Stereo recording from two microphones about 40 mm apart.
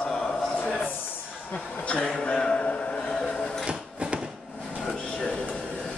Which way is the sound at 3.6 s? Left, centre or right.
Right.